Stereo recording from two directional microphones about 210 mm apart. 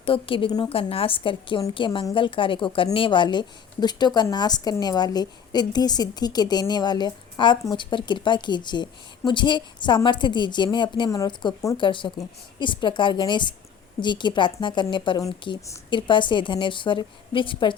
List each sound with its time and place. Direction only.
0.0 s a woman's voice: 25° left (ahead or behind)